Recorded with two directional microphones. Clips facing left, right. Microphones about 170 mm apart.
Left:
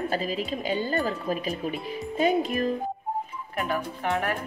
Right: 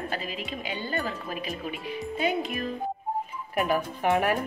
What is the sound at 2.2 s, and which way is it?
Speech, 45° left (ahead or behind).